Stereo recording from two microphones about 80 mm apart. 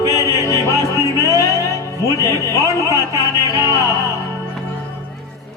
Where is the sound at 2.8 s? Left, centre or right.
Right.